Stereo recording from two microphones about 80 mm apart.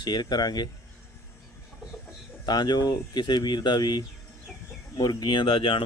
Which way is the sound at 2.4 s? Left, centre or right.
Left.